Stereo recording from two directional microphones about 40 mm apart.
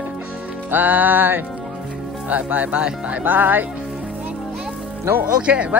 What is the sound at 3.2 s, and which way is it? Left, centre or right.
Music, right.